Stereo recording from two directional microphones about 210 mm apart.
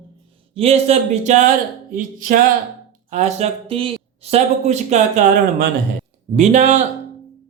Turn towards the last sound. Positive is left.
turn(degrees=-35)  # may be behind; listen again after turning